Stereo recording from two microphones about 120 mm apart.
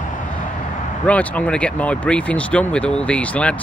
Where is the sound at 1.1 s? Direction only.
10° left (ahead or behind).